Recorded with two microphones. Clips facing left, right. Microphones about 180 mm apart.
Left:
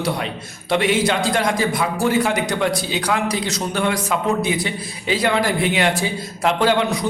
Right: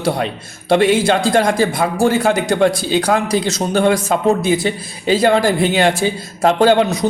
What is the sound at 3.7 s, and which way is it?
Speech, 40° right (ahead or behind).